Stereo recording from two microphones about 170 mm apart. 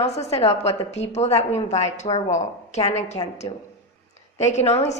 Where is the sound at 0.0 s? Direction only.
40° left (ahead or behind).